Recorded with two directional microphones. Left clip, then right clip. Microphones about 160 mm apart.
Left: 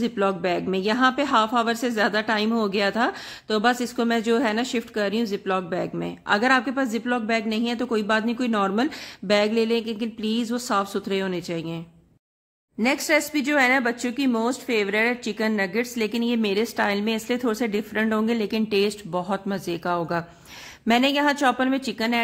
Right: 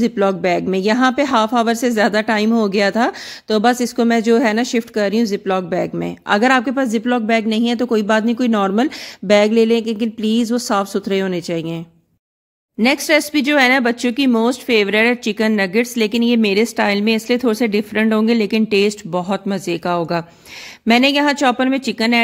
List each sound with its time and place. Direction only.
0.0 s speech: 40° right (ahead or behind)
12.8 s speech: 40° right (ahead or behind)